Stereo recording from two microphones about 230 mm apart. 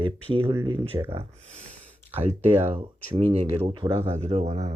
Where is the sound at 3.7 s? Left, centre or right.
Right.